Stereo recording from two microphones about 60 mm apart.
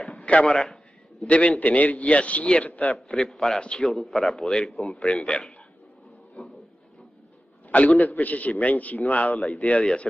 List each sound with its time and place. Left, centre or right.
0.2 s a man's voice: centre
3.2 s a man's voice: centre
4.8 s a man's voice: left
6.4 s didgeridoo: left
8.0 s a man's voice: left
9.3 s a man's voice: centre
9.6 s a man's voice: left